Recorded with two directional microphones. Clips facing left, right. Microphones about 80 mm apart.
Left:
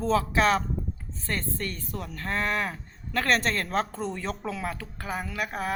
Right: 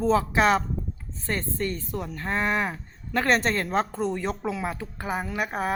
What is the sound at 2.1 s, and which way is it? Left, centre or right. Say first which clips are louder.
Speech: right 2 dB; centre.